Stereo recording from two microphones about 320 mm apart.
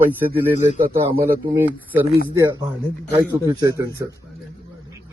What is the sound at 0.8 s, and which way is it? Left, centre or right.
Speech, right.